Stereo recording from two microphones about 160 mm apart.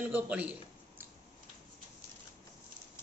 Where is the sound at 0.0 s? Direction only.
10° right (ahead or behind).